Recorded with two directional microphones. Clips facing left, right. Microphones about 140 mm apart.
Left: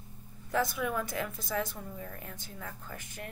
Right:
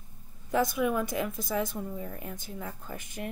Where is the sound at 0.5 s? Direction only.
15° right (ahead or behind).